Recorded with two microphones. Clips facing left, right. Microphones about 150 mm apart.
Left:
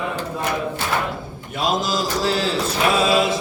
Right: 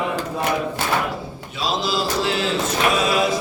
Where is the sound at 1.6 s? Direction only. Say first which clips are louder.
Left 1 dB; 45° left (ahead or behind).